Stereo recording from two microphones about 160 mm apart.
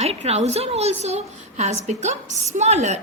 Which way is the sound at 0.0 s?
40° right (ahead or behind).